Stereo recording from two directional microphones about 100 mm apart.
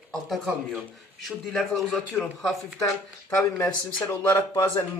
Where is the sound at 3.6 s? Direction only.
20° left (ahead or behind).